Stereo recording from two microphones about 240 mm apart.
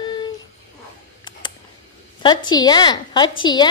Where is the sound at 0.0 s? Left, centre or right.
Centre.